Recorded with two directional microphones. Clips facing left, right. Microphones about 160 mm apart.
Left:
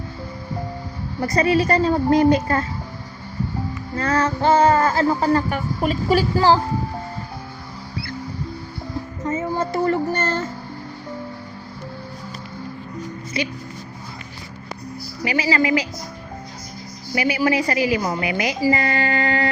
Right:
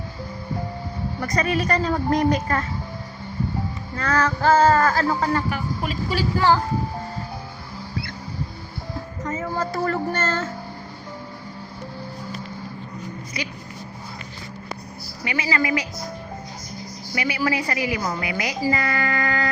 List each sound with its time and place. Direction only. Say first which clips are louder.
1.2 s a woman's voice: left 6 dB; 30° left (ahead or behind)
3.9 s speech: left 2 dB; 30° left (ahead or behind)
4.5 s speech: left 1 dB; 20° left (ahead or behind)
5.5 s a woman's voice: left 4 dB; 40° left (ahead or behind)
9.2 s speech: left 3 dB; 25° left (ahead or behind)
13.4 s speech: left 7 dB; 25° left (ahead or behind)
15.2 s speech: left 4 dB; 30° left (ahead or behind)
17.2 s speech: left 4 dB; 25° left (ahead or behind)